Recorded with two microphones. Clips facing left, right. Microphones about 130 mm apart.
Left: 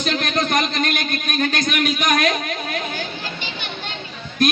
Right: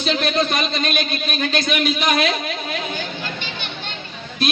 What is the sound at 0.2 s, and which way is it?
Speech, 55° left (ahead or behind).